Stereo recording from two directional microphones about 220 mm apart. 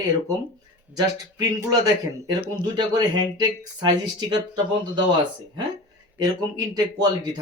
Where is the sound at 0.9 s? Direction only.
15° right (ahead or behind).